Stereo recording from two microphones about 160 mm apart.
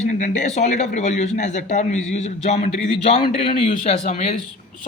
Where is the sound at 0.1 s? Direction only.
50° left (ahead or behind).